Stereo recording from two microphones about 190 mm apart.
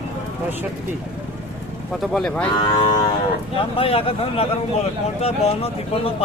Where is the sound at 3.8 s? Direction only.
30° left (ahead or behind).